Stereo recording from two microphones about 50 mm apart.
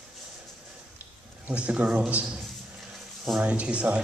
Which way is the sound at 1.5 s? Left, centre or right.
Right.